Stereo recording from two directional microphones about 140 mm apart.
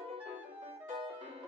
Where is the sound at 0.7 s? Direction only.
45° right (ahead or behind).